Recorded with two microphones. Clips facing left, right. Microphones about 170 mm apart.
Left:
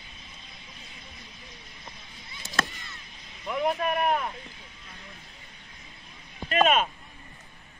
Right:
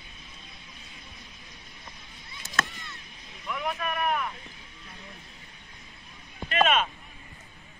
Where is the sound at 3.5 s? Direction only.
35° left (ahead or behind).